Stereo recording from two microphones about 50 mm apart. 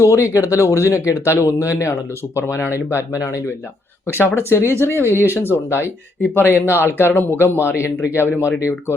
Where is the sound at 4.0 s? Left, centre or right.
Left.